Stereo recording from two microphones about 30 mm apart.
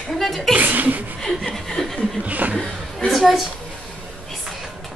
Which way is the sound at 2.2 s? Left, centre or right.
Right.